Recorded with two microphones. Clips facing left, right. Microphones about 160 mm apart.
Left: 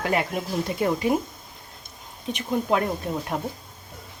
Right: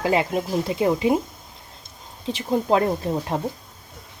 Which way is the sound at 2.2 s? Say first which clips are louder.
Right 3 dB; 30° right (ahead or behind).